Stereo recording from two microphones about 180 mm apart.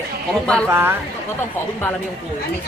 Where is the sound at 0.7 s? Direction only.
10° right (ahead or behind).